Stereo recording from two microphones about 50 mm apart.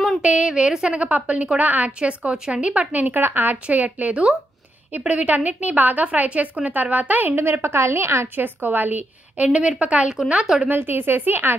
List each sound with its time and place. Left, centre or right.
0.2 s a woman's voice: right
3.6 s a woman's voice: right
7.6 s a woman's voice: right
8.4 s a woman's voice: right
9.5 s a woman's voice: right
10.4 s a woman's voice: centre
10.7 s speech: right